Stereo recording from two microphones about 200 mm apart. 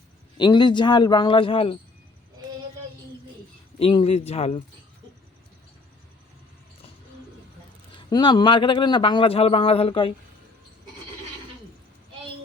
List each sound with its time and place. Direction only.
0.3 s a man's voice: 20° left (ahead or behind)
3.8 s a man's voice: 30° left (ahead or behind)
8.1 s a man's voice: 20° left (ahead or behind)